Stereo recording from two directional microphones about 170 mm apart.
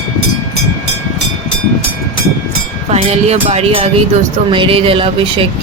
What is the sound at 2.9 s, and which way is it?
Speech, 40° right (ahead or behind).